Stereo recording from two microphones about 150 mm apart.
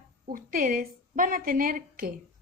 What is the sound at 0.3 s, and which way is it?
A woman's voice, 70° right (ahead or behind).